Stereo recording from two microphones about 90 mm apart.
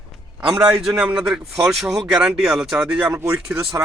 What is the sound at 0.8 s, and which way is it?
A man's voice, 5° right (ahead or behind).